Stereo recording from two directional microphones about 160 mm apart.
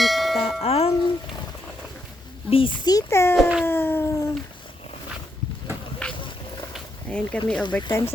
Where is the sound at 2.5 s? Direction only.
35° left (ahead or behind).